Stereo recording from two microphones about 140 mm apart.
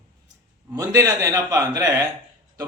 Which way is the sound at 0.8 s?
25° right (ahead or behind).